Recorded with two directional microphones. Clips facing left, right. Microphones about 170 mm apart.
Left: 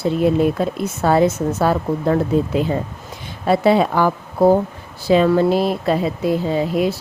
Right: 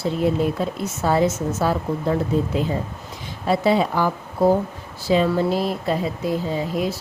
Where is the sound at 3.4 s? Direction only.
60° left (ahead or behind).